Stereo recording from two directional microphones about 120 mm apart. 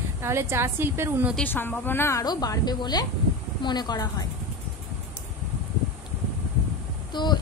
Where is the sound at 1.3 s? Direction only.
15° left (ahead or behind).